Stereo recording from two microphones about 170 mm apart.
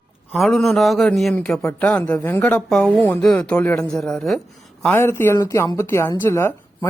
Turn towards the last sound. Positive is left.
turn(degrees=15)  # may be behind; listen again after turning